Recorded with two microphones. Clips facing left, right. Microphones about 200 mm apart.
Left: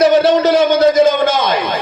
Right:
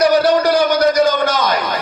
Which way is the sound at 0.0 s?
25° left (ahead or behind).